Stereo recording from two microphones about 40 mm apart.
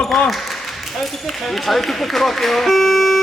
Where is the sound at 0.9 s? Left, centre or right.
Centre.